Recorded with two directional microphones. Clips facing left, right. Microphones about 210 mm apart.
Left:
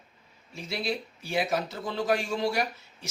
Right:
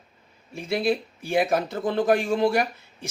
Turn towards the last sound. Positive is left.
turn(degrees=-55)  # may be behind; listen again after turning